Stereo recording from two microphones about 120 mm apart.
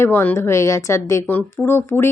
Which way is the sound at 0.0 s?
15° left (ahead or behind).